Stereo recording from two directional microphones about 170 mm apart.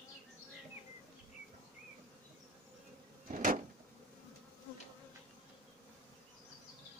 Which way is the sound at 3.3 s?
50° right (ahead or behind).